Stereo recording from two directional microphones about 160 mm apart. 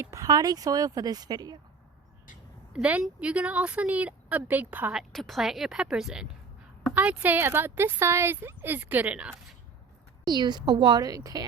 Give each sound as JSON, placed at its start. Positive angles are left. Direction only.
{"t": 0.0, "sound": "speech", "side_deg": -20}
{"t": 2.7, "sound": "a woman's voice", "side_deg": -5}
{"t": 10.2, "sound": "speech", "side_deg": -25}